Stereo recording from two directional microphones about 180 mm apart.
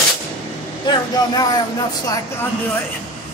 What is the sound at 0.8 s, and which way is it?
Speech, 20° left (ahead or behind).